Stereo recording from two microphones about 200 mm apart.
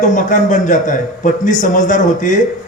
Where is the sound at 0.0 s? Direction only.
40° left (ahead or behind).